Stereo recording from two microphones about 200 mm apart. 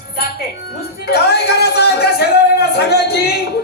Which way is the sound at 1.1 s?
55° left (ahead or behind).